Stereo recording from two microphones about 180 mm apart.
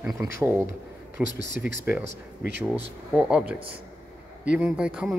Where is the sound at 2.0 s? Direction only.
75° right (ahead or behind).